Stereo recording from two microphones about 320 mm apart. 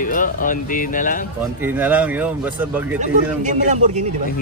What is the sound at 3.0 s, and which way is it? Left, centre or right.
A man's voice, right.